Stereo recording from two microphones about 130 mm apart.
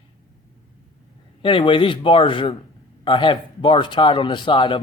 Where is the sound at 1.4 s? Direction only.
40° left (ahead or behind).